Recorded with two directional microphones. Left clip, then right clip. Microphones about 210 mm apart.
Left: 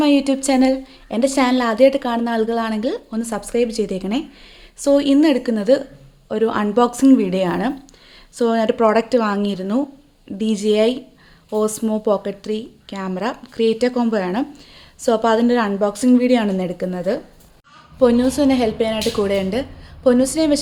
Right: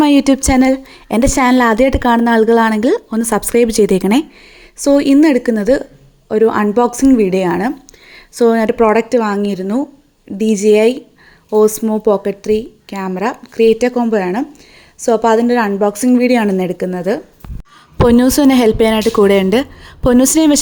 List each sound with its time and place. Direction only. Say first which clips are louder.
0.0 s a woman's voice: right 5 dB; 35° right (ahead or behind)
4.8 s a woman's voice: right 5 dB; 25° right (ahead or behind)
18.0 s speech: right 5 dB; 40° right (ahead or behind)